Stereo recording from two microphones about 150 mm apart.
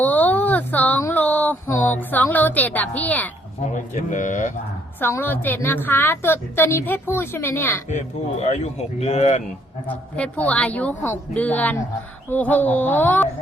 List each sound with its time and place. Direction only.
0.0 s a sound: 10° left (ahead or behind)
3.6 s speech: 60° left (ahead or behind)
4.9 s a woman's voice: 15° left (ahead or behind)
7.9 s speech: 50° left (ahead or behind)
9.8 s a woman's voice: 10° left (ahead or behind)